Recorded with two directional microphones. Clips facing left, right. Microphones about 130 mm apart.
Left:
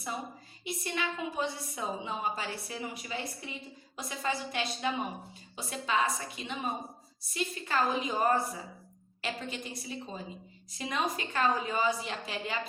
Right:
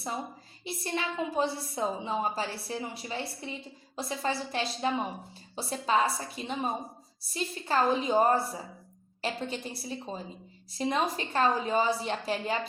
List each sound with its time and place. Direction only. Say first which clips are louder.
0.6 s a woman's voice: right 1 dB; 30° right (ahead or behind)